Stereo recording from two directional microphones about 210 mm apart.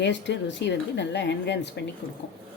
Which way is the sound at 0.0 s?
55° left (ahead or behind).